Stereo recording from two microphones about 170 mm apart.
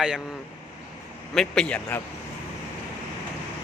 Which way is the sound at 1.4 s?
5° left (ahead or behind).